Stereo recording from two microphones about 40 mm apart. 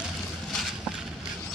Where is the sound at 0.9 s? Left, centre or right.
Right.